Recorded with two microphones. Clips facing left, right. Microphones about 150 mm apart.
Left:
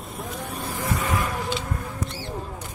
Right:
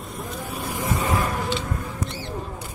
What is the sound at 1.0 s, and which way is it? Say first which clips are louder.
Vehicle: right 4 dB; 40° right (ahead or behind).